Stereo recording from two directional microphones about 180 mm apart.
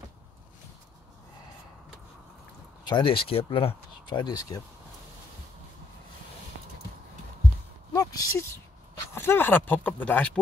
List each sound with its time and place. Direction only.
2.9 s speech: 25° left (ahead or behind)
7.9 s a sound: 20° left (ahead or behind)
8.9 s speech: 15° left (ahead or behind)